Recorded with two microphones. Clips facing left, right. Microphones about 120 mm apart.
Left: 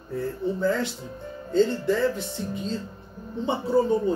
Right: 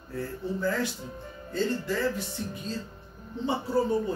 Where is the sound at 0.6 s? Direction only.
25° left (ahead or behind).